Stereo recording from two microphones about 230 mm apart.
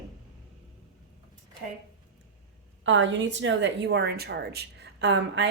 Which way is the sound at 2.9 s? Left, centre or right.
Right.